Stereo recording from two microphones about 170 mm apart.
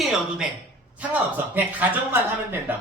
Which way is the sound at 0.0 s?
5° right (ahead or behind).